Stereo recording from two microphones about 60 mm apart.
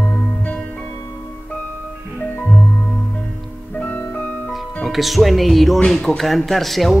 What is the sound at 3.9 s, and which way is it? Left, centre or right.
Music, left.